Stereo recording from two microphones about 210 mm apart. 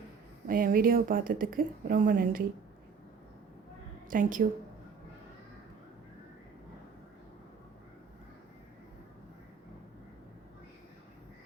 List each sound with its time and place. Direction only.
0.4 s a woman's voice: 40° right (ahead or behind)
4.1 s a woman's voice: 40° right (ahead or behind)